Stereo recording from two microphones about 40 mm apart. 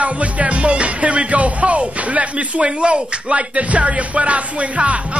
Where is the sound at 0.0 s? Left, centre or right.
Right.